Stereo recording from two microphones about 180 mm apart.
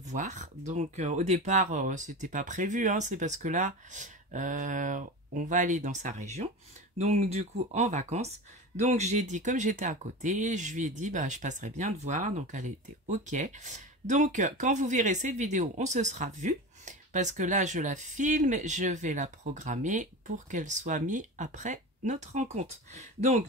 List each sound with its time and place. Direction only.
0.0 s speech: 40° right (ahead or behind)